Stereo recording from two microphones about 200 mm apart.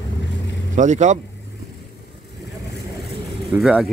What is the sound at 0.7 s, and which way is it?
Speech, 35° right (ahead or behind).